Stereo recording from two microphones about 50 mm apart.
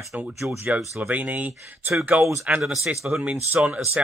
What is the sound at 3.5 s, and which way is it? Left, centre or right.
Speech, right.